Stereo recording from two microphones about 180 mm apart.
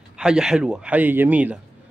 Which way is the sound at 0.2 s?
5° right (ahead or behind).